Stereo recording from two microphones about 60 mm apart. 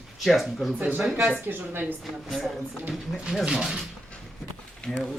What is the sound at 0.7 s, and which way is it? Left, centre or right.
A woman's voice, right.